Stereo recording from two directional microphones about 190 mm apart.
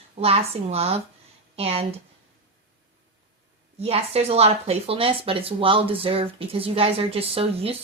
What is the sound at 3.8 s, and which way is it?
Speech, 30° right (ahead or behind).